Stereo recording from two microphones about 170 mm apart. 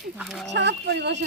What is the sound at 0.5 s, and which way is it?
Speech, 90° right.